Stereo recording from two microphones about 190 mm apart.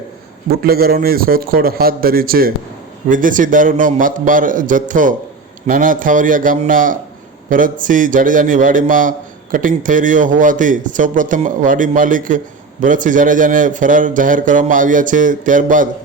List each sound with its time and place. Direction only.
0.6 s a man's voice: 50° right (ahead or behind)